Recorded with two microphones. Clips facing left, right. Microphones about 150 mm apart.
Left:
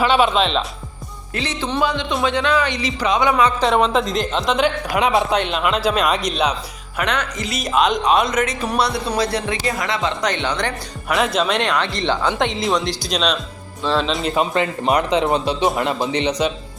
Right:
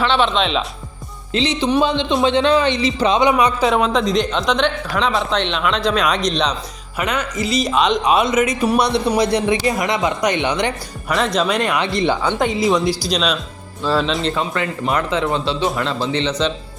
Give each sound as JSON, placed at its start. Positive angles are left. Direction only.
{"t": 0.0, "sound": "speech", "side_deg": 10}
{"t": 1.3, "sound": "speech", "side_deg": -20}
{"t": 3.6, "sound": "speech", "side_deg": 0}
{"t": 7.0, "sound": "speech", "side_deg": -5}
{"t": 11.1, "sound": "speech", "side_deg": 0}
{"t": 11.8, "sound": "speech", "side_deg": -15}
{"t": 12.2, "sound": "speech", "side_deg": 0}
{"t": 14.3, "sound": "speech", "side_deg": 20}